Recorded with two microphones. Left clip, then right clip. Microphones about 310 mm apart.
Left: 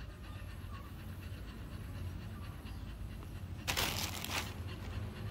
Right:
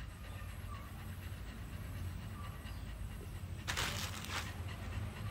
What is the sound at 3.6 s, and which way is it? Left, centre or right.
Crushing, left.